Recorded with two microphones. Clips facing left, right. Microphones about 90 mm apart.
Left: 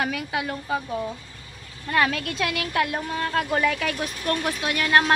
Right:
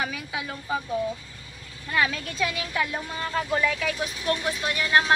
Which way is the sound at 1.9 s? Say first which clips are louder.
Left 3 dB; 65° left (ahead or behind).